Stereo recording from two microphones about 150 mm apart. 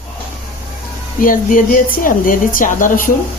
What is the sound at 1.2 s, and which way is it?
Speech, 65° left (ahead or behind).